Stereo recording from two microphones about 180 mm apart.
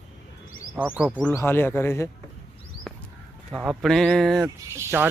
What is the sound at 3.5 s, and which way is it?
Speech, centre (ahead or behind).